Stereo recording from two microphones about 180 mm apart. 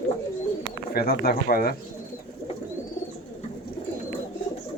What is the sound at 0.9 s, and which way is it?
Speech, 60° left (ahead or behind).